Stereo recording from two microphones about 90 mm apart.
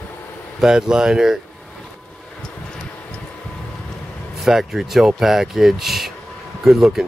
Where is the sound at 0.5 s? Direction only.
5° right (ahead or behind).